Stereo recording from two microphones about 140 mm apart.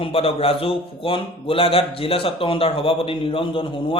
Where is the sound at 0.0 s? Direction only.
45° left (ahead or behind).